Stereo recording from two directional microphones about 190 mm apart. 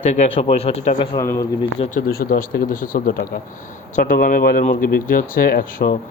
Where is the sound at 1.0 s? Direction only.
15° left (ahead or behind).